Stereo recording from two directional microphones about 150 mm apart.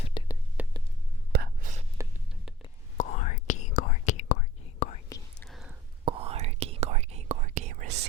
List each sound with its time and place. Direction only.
0.2 s whispering: 30° left (ahead or behind)
0.6 s a sound: 10° right (ahead or behind)
1.3 s whispering: 80° right
2.0 s music: 20° right (ahead or behind)
3.0 s whispering: 55° left (ahead or behind)
5.5 s a sound: centre (ahead or behind)
6.1 s whispering: 40° right (ahead or behind)